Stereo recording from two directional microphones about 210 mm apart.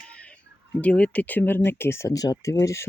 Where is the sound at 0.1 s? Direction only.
5° left (ahead or behind).